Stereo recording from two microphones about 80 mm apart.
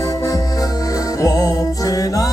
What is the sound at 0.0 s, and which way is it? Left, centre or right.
Music, left.